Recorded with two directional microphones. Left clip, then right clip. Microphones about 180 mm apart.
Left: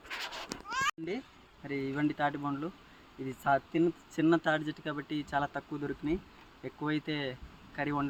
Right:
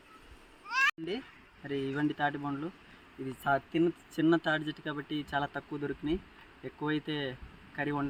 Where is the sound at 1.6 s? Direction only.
10° left (ahead or behind).